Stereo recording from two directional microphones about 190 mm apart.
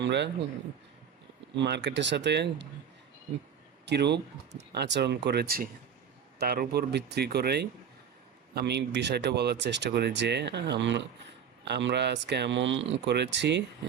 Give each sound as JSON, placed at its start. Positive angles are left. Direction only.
{"t": 0.0, "sound": "speech", "side_deg": -65}
{"t": 1.5, "sound": "speech", "side_deg": -65}
{"t": 3.8, "sound": "speech", "side_deg": -60}